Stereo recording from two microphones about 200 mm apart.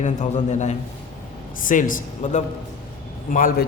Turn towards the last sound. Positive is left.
turn(degrees=45)  # may be behind; listen again after turning